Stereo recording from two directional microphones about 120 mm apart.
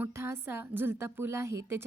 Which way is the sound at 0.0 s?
20° right (ahead or behind).